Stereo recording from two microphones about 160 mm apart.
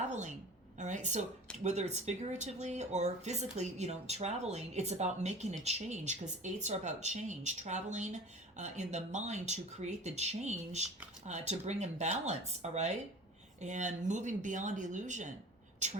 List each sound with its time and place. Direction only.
0.1 s a woman's voice: 45° right (ahead or behind)